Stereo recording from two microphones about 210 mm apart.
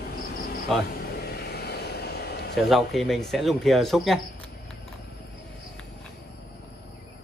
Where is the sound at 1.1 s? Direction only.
50° left (ahead or behind).